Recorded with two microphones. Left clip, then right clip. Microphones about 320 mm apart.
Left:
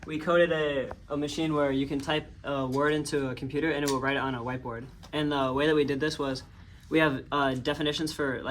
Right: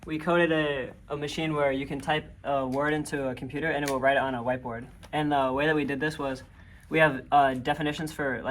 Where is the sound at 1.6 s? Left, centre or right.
Right.